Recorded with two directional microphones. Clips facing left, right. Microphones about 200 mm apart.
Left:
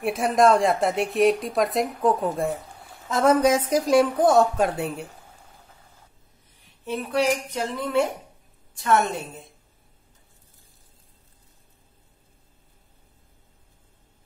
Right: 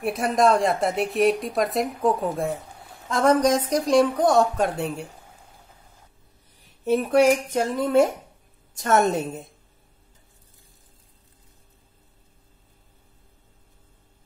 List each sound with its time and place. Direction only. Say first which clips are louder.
0.0 s speech: left 1 dB; centre (ahead or behind)
6.8 s a woman's voice: right 6 dB; 45° right (ahead or behind)